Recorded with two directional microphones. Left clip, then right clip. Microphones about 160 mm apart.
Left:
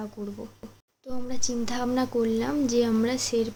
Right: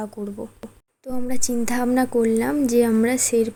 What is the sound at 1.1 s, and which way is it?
A woman's voice, 40° right (ahead or behind).